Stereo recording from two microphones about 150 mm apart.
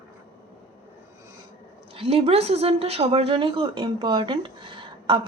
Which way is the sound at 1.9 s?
40° right (ahead or behind).